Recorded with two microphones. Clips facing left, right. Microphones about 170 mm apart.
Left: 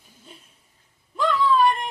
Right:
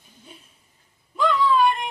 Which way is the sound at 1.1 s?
Centre (ahead or behind).